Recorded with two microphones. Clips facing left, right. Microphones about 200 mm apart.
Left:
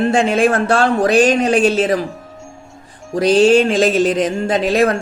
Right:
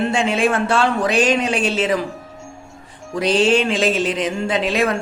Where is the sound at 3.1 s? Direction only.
40° left (ahead or behind).